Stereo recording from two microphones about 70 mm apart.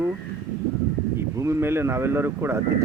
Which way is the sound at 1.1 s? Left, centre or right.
Right.